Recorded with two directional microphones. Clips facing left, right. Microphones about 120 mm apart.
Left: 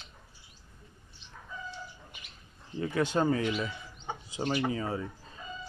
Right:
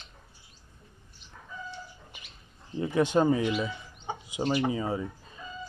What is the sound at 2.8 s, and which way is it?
Speech, 20° right (ahead or behind).